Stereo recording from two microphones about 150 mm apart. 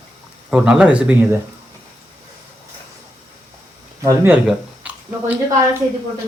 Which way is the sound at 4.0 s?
15° right (ahead or behind).